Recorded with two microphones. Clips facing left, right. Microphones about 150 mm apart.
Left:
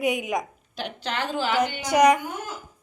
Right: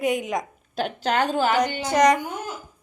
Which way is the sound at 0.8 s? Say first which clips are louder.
Right 7 dB; 45° right (ahead or behind).